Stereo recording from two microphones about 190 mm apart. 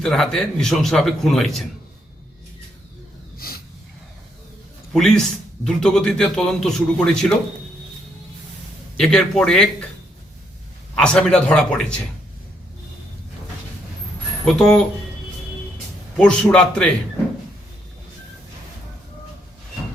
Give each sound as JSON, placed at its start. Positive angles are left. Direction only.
{"t": 0.0, "sound": "speech", "side_deg": 0}
{"t": 3.3, "sound": "snort", "side_deg": 50}
{"t": 4.9, "sound": "speech", "side_deg": 5}
{"t": 9.0, "sound": "speech", "side_deg": 0}
{"t": 10.9, "sound": "speech", "side_deg": 5}
{"t": 14.4, "sound": "speech", "side_deg": 5}
{"t": 16.1, "sound": "speech", "side_deg": 5}